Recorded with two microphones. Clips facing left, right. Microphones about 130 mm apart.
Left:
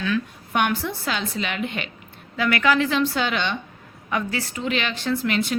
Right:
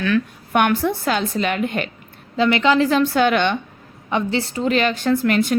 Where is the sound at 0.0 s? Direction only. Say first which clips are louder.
Right 5 dB; 55° right (ahead or behind).